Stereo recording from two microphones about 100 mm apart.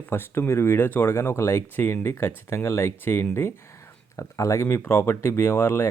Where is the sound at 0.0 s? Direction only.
20° left (ahead or behind).